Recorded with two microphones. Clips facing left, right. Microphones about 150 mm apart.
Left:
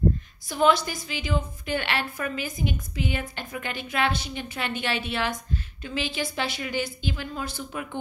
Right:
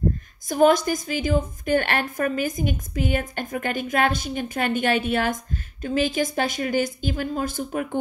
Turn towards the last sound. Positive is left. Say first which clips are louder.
# right 7 dB
turn(degrees=-45)  # may be behind; listen again after turning